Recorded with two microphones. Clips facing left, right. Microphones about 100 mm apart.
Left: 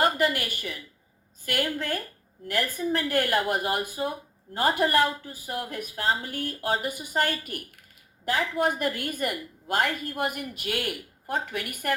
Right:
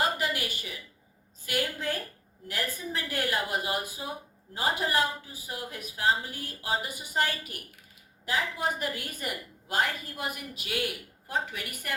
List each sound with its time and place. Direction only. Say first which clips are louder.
0.0 s a woman's voice: left 5 dB; 55° left (ahead or behind)